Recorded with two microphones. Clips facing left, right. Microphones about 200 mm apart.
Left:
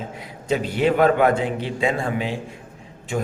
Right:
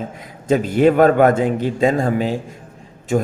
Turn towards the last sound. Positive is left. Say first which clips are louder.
# right 7 dB
turn(degrees=-45)  # may be behind; listen again after turning